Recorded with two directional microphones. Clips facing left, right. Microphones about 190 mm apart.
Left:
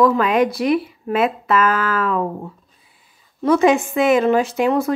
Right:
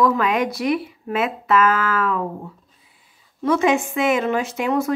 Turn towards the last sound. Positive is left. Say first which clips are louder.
# left 3 dB
turn(degrees=35)  # may be behind; listen again after turning